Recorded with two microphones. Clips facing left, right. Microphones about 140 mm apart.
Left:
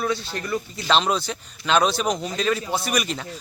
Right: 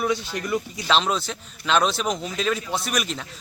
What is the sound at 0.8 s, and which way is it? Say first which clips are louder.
A man's voice: left 3 dB; centre (ahead or behind).